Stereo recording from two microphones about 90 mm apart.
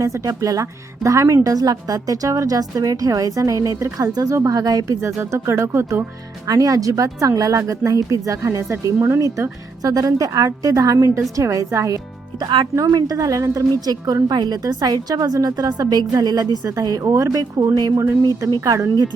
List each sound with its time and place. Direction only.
0.0 s a woman's voice: 40° right (ahead or behind)
4.9 s a woman's voice: 30° right (ahead or behind)
9.8 s a woman's voice: 40° right (ahead or behind)
12.4 s speech: 60° right (ahead or behind)
12.7 s a woman's voice: 45° right (ahead or behind)
13.9 s a woman's voice: 45° right (ahead or behind)